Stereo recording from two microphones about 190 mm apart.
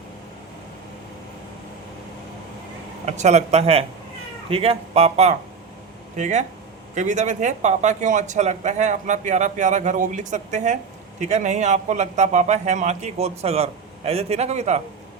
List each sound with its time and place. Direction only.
3.1 s a man's voice: 35° right (ahead or behind)